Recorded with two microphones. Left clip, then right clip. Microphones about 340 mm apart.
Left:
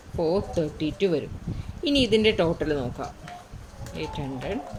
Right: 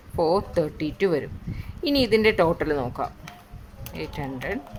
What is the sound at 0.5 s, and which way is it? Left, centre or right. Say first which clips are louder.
Speech: right 2 dB; right.